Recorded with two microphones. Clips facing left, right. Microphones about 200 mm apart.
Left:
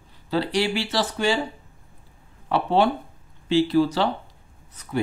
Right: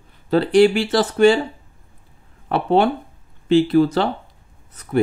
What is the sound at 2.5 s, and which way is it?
Speech, 55° right (ahead or behind).